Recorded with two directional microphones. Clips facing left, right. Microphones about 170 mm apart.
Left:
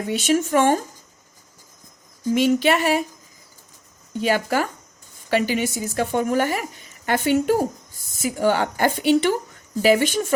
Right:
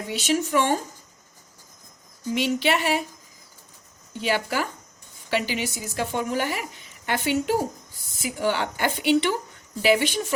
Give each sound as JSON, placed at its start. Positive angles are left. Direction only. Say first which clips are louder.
{"t": 0.1, "sound": "speech", "louder": "left 4 dB", "side_deg": 50}
{"t": 2.3, "sound": "speech", "louder": "left 5 dB", "side_deg": 45}
{"t": 4.2, "sound": "speech", "louder": "left 4 dB", "side_deg": 45}